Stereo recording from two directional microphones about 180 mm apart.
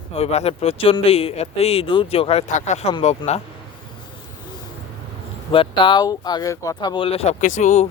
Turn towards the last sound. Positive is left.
turn(degrees=40)  # may be behind; listen again after turning